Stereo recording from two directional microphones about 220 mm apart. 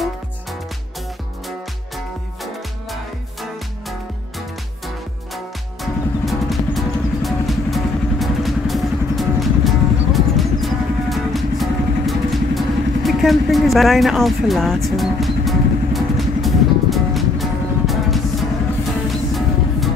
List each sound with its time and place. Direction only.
6.2 s music: centre (ahead or behind)